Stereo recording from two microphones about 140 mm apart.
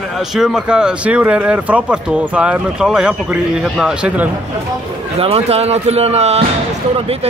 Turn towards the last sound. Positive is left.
turn(degrees=-50)  # may be behind; listen again after turning